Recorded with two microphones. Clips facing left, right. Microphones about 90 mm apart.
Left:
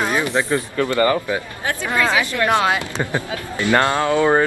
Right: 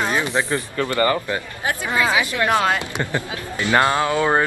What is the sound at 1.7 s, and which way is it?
Speech, 10° right (ahead or behind).